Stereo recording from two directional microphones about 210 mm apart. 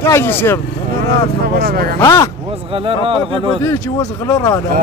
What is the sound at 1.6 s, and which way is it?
Speech, 45° right (ahead or behind).